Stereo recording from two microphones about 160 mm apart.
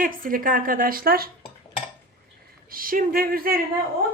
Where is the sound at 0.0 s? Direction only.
60° right (ahead or behind).